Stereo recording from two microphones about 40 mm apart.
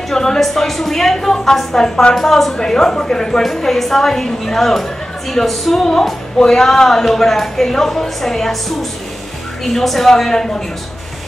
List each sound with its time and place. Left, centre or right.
0.1 s a woman's voice: centre
3.4 s speech: centre